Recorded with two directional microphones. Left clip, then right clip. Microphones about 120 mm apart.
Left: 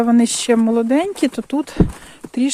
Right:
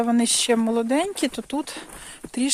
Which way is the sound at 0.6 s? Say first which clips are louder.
Left 6 dB; 25° left (ahead or behind).